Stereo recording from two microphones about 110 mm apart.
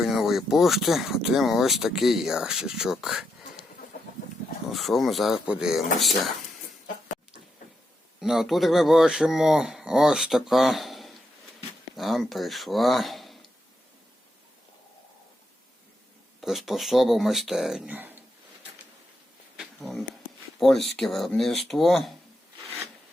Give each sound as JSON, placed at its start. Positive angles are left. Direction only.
{"t": 0.0, "sound": "speech", "side_deg": -5}
{"t": 4.7, "sound": "speech", "side_deg": 0}
{"t": 8.2, "sound": "speech", "side_deg": -5}
{"t": 16.4, "sound": "speech", "side_deg": 0}
{"t": 17.9, "sound": "speech", "side_deg": -15}
{"t": 20.6, "sound": "speech", "side_deg": 0}